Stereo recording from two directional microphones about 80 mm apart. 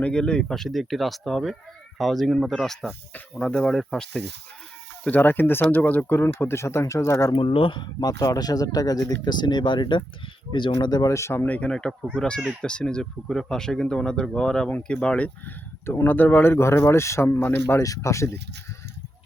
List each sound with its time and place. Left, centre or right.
0.0 s speech: centre
5.0 s speech: left
7.3 s speech: left
8.0 s speech: left
11.1 s speech: left
11.4 s speech: centre
14.7 s speech: left
15.9 s speech: left
17.4 s speech: left
17.7 s speech: left